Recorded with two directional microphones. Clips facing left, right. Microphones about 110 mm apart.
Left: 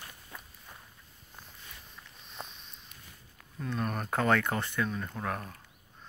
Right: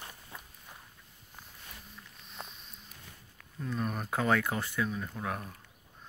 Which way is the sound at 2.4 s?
5° right (ahead or behind).